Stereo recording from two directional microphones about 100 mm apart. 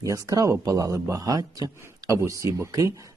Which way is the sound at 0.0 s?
35° right (ahead or behind).